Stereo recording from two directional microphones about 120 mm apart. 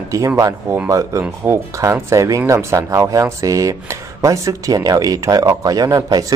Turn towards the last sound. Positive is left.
turn(degrees=-30)  # may be behind; listen again after turning